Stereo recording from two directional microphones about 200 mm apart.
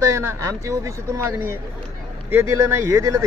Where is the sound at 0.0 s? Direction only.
15° right (ahead or behind).